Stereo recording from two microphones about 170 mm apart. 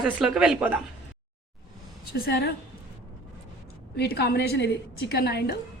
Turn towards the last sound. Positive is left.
turn(degrees=70)  # may be behind; listen again after turning